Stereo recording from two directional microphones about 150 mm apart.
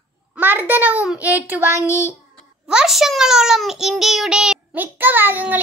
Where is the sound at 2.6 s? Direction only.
5° right (ahead or behind).